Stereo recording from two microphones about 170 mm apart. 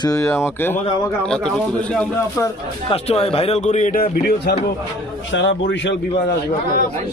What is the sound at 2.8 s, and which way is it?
Speech, 35° left (ahead or behind).